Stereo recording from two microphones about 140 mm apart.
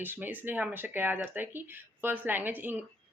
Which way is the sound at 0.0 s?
15° right (ahead or behind).